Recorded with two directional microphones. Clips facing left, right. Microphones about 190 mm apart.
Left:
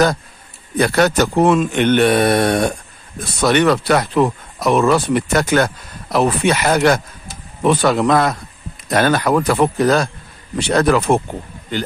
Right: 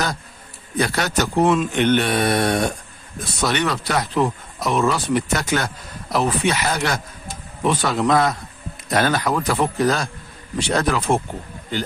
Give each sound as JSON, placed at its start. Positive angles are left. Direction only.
{"t": 0.7, "sound": "speech", "side_deg": 55}